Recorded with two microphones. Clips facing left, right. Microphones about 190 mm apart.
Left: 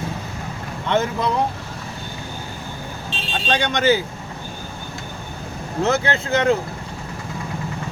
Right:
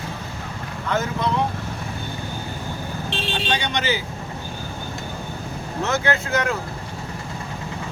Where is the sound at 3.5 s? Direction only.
50° left (ahead or behind).